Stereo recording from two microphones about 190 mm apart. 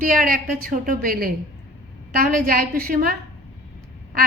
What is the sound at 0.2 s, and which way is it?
A woman's voice, 50° right (ahead or behind).